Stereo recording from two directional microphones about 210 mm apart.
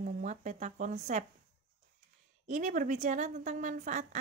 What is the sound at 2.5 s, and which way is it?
Speech, 35° right (ahead or behind).